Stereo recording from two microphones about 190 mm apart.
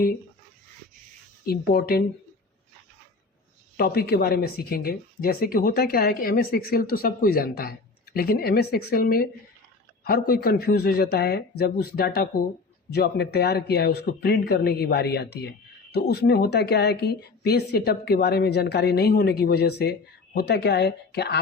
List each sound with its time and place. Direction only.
1.5 s speech: 55° left (ahead or behind)
3.8 s speech: 55° left (ahead or behind)